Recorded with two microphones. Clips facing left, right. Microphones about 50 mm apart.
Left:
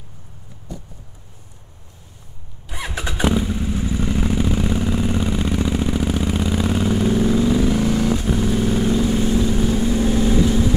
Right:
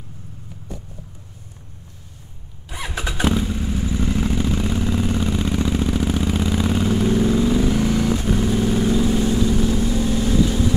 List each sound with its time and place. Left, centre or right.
2.7 s motorcycle: centre
9.9 s vehicle: left